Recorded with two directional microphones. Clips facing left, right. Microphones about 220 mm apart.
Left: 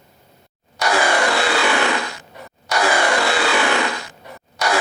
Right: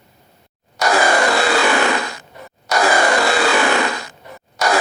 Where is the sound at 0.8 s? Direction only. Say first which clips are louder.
Right 3 dB; 40° right (ahead or behind).